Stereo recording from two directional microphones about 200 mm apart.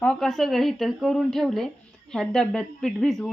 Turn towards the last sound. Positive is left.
turn(degrees=0)  # may be behind; listen again after turning